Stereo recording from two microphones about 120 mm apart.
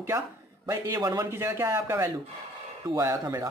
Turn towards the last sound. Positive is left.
turn(degrees=-25)  # may be behind; listen again after turning